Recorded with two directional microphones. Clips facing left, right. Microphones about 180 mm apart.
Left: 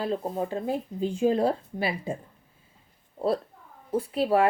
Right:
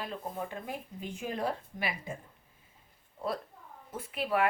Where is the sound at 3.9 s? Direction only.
30° left (ahead or behind).